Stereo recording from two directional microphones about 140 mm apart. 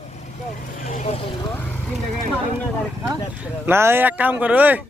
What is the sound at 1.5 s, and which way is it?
Speech, 10° left (ahead or behind).